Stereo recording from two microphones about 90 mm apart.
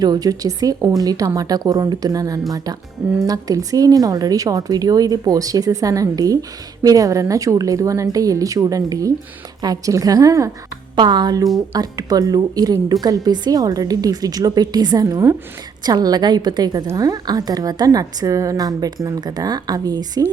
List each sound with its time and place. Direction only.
0.0 s a woman's voice: 45° right (ahead or behind)
10.9 s speech: 55° right (ahead or behind)